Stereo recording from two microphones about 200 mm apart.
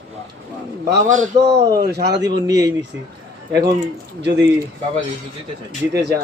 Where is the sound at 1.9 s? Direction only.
55° right (ahead or behind).